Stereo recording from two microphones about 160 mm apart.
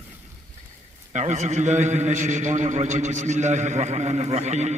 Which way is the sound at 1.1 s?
45° right (ahead or behind).